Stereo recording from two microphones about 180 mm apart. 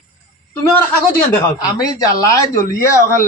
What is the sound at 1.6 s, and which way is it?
Speech, 20° left (ahead or behind).